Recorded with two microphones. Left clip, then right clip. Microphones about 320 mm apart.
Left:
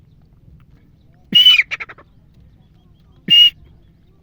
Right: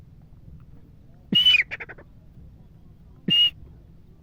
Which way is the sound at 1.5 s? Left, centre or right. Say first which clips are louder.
Left 6 dB; left.